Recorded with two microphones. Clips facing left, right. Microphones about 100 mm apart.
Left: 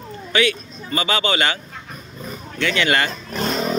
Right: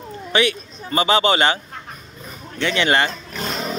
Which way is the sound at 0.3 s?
30° right (ahead or behind).